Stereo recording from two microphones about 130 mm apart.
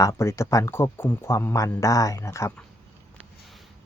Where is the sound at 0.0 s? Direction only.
25° left (ahead or behind).